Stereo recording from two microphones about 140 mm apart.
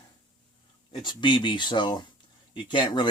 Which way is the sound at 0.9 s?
35° left (ahead or behind).